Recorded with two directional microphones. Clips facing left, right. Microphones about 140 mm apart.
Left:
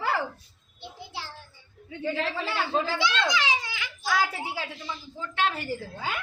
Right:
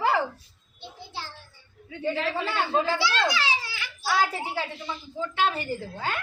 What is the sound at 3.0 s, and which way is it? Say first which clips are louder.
Speech: right 1 dB; 20° left (ahead or behind).